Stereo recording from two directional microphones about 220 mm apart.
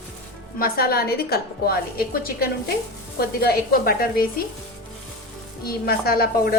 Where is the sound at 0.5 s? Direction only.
45° left (ahead or behind).